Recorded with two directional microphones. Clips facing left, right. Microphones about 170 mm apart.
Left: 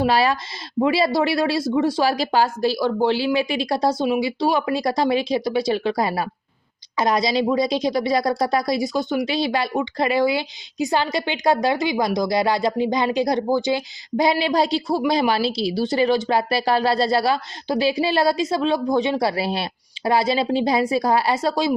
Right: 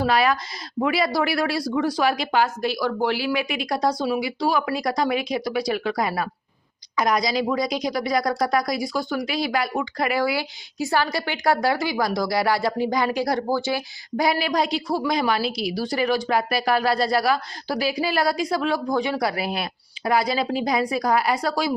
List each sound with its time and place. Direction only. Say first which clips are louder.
0.1 s speech: left 1 dB; 30° left (ahead or behind)